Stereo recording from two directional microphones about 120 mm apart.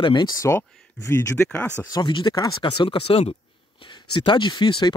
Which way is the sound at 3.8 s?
40° left (ahead or behind).